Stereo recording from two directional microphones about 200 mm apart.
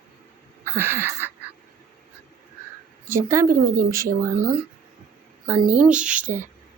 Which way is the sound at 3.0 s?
15° right (ahead or behind).